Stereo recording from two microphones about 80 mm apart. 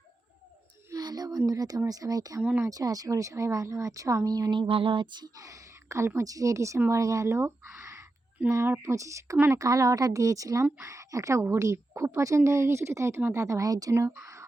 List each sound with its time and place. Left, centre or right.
0.9 s speech: right
4.5 s a sound: right
5.4 s a woman's voice: right
8.4 s speech: right
8.8 s a woman's voice: right
13.9 s a woman's voice: right